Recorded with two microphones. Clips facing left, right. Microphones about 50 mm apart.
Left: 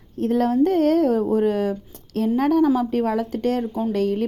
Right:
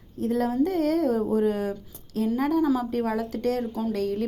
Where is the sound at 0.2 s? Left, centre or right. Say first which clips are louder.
Left 5 dB; left.